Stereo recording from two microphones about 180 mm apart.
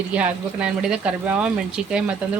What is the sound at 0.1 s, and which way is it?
Speech, 5° right (ahead or behind).